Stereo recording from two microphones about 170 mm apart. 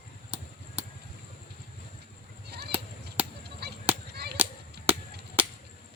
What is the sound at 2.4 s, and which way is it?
Chop, 75° right (ahead or behind).